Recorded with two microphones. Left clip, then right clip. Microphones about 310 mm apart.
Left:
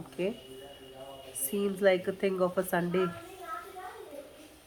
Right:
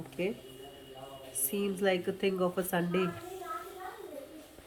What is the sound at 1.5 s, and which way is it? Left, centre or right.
Speech, centre.